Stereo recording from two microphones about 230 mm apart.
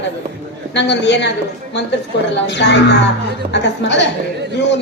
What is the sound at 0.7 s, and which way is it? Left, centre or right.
Speech, left.